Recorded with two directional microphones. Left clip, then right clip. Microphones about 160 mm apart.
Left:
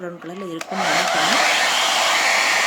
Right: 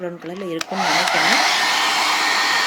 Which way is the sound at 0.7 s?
5° left (ahead or behind).